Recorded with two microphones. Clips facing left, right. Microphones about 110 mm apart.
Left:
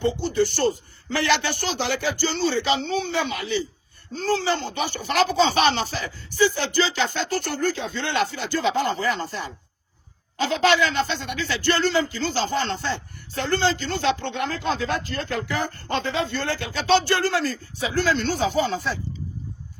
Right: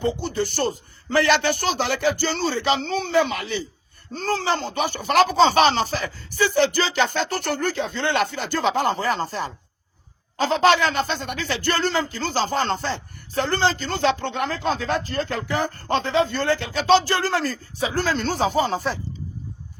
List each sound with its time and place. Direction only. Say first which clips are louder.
0.0 s speech: left 2 dB; 45° right (ahead or behind)